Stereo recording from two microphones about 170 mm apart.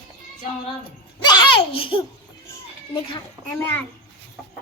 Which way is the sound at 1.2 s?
30° left (ahead or behind).